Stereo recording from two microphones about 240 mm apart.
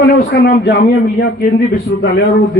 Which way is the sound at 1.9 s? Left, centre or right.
Left.